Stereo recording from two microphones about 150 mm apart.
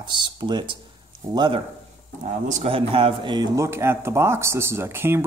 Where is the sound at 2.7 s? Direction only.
40° right (ahead or behind).